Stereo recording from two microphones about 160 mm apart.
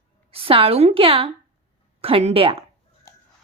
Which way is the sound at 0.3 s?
35° right (ahead or behind).